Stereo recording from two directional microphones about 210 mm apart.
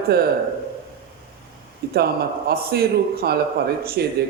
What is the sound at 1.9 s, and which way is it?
Speech, 50° right (ahead or behind).